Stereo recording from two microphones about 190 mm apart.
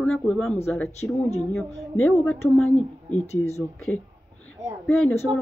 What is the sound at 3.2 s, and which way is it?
Speech, 35° left (ahead or behind).